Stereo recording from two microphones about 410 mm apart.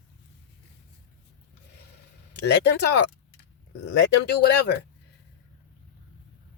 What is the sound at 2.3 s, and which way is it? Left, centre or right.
Speech, left.